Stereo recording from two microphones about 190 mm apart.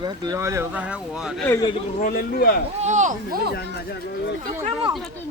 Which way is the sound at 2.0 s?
50° left (ahead or behind).